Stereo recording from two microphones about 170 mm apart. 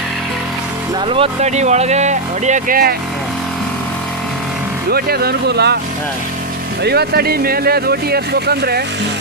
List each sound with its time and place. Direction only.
1.0 s speech: 35° right (ahead or behind); by 2.9 s 55° right (ahead or behind)
4.9 s speech: 65° right (ahead or behind)
6.8 s speech: 70° right (ahead or behind)